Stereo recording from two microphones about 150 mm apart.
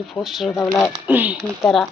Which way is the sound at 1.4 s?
Centre (ahead or behind).